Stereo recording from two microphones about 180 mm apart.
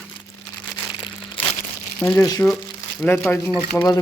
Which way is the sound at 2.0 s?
15° left (ahead or behind).